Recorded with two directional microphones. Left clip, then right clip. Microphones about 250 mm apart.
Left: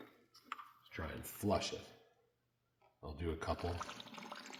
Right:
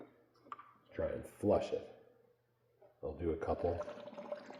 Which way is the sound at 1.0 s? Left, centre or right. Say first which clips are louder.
Right 7 dB; left.